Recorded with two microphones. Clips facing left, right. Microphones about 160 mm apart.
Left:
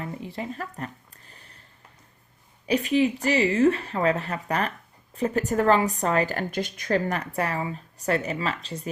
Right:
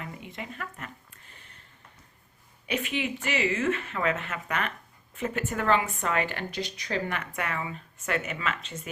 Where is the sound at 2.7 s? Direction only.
35° left (ahead or behind).